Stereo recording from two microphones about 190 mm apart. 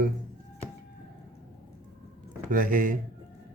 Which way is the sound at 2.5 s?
45° right (ahead or behind).